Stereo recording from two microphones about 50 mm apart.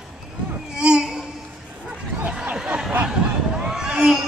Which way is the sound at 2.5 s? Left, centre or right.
Centre.